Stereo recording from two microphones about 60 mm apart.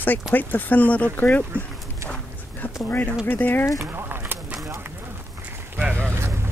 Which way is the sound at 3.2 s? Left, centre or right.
Left.